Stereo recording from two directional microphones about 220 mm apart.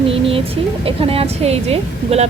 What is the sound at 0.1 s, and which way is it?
A woman's voice, 25° right (ahead or behind).